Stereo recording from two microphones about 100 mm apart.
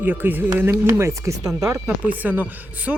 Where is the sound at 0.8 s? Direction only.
30° right (ahead or behind).